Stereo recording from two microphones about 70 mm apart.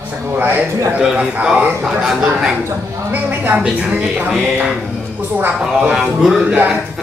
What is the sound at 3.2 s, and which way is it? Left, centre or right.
Speech, right.